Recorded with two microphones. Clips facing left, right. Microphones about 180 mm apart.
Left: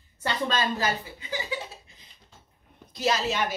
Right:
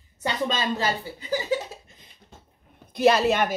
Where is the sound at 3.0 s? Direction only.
60° right (ahead or behind).